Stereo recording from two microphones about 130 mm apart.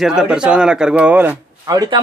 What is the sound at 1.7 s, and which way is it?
Speech, 30° right (ahead or behind).